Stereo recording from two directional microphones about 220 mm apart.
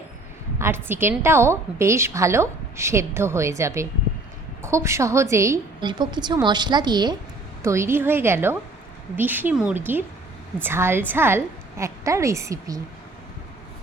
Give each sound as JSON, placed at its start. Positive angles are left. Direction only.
{"t": 0.6, "sound": "a woman's voice", "side_deg": -10}